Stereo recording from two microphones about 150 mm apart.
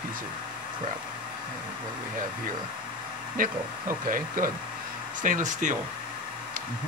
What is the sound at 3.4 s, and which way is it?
Speech, 65° right (ahead or behind).